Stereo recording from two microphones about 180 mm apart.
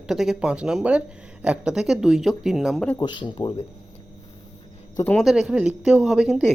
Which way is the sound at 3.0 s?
25° left (ahead or behind).